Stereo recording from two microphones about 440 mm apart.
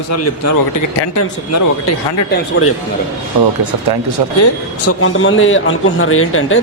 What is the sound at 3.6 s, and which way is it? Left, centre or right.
Speech, right.